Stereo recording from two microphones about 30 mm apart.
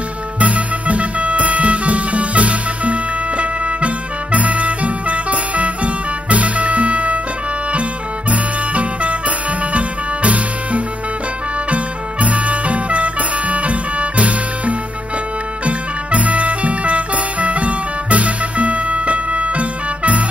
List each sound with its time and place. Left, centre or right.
0.3 s music: right
8.3 s music: right
12.2 s music: right
16.1 s music: right